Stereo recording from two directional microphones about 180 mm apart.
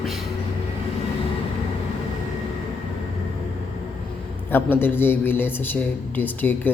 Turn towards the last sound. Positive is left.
turn(degrees=10)  # may be behind; listen again after turning